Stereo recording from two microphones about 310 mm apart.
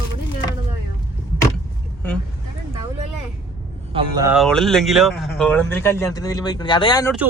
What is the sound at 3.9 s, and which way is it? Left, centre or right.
Speech, centre.